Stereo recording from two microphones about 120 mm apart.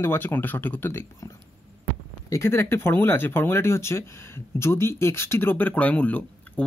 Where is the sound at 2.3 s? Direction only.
25° left (ahead or behind).